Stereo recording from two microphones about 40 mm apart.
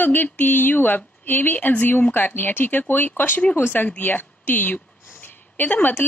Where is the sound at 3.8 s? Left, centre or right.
Left.